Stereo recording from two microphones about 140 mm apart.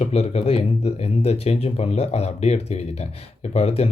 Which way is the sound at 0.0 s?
45° left (ahead or behind).